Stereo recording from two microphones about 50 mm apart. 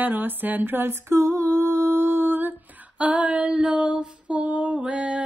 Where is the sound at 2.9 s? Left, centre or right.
Right.